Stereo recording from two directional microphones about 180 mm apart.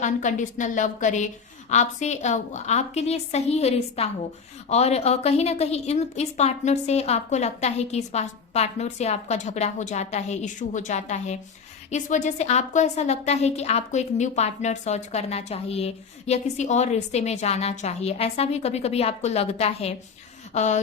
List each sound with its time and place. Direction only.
0.0 s a woman's voice: 45° left (ahead or behind)